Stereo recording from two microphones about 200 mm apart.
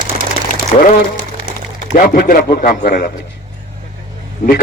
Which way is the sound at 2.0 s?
45° left (ahead or behind).